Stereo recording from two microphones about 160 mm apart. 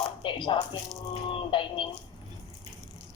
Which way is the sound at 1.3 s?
30° left (ahead or behind).